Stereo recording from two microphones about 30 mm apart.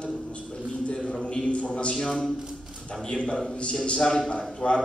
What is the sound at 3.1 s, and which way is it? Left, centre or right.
Speech, left.